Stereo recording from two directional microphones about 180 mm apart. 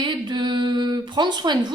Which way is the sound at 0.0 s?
25° right (ahead or behind).